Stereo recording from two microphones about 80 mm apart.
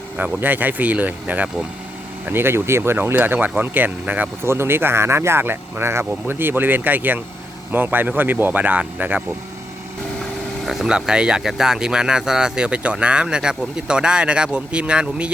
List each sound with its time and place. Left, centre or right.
0.2 s speech: right
4.4 s speech: right
10.6 s speech: centre